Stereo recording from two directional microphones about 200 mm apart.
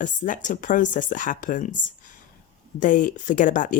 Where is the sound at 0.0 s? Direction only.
40° left (ahead or behind).